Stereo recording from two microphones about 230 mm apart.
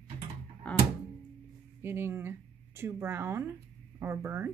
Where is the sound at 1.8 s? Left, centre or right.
Centre.